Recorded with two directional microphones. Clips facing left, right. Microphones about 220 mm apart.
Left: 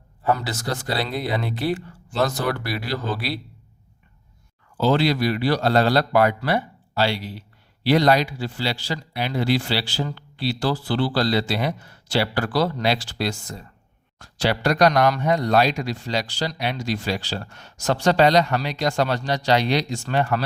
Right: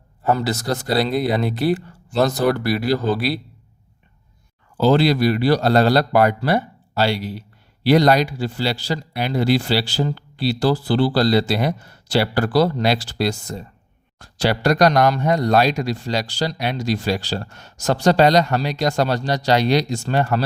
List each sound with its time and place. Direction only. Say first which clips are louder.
0.3 s speech: right 6 dB; 40° right (ahead or behind)
4.8 s speech: right 4 dB; 40° right (ahead or behind)